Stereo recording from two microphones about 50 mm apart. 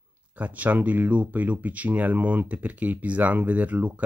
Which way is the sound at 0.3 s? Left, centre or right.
Right.